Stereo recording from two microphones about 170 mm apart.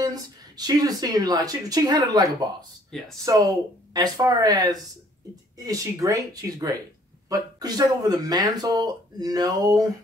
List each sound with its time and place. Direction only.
0.0 s speech: 25° right (ahead or behind)
2.9 s speech: 5° left (ahead or behind)
3.3 s speech: 20° right (ahead or behind)